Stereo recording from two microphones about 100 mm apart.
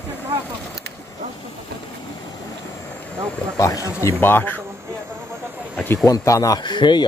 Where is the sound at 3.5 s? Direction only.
30° left (ahead or behind).